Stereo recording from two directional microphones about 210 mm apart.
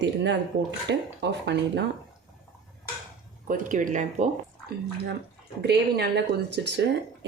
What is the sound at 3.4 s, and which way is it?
Speech, 40° right (ahead or behind).